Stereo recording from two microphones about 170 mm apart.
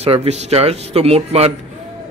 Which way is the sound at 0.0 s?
35° right (ahead or behind).